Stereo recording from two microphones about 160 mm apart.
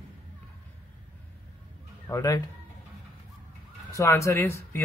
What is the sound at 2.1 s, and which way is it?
Speech, 20° left (ahead or behind).